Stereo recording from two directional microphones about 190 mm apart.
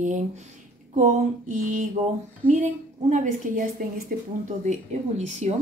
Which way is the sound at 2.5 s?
40° right (ahead or behind).